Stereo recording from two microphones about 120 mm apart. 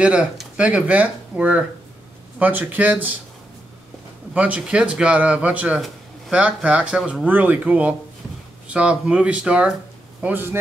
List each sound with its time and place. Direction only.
0.0 s speech: 10° right (ahead or behind)
4.3 s speech: 10° right (ahead or behind)